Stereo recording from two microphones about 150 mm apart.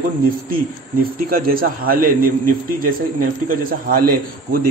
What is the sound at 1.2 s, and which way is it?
Speech, 75° right (ahead or behind).